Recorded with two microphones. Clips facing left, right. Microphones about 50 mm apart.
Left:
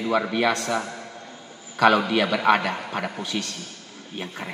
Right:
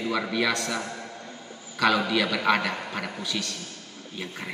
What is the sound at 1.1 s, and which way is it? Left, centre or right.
Vehicle, centre.